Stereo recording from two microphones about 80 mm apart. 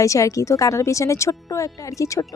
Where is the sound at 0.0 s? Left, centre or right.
Left.